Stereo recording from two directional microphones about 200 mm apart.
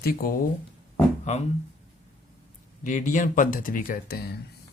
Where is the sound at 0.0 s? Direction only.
45° left (ahead or behind).